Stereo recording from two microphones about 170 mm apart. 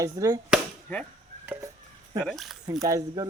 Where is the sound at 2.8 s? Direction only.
20° right (ahead or behind).